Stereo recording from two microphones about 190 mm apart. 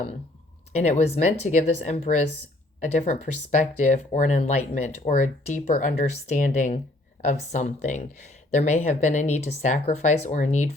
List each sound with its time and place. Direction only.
0.7 s speech: 35° left (ahead or behind)